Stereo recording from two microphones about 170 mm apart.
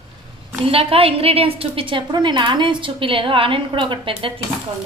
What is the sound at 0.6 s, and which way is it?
A woman's voice, 35° right (ahead or behind).